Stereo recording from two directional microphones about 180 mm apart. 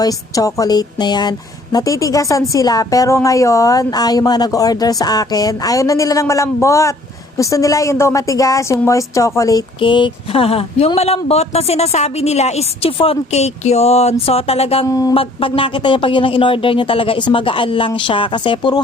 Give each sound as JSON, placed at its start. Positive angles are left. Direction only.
{"t": 0.0, "sound": "a woman's voice", "side_deg": 20}
{"t": 14.8, "sound": "a woman's voice", "side_deg": 20}
{"t": 15.1, "sound": "a woman's voice", "side_deg": 30}